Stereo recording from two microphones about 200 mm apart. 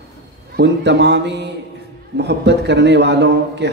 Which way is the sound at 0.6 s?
60° right (ahead or behind).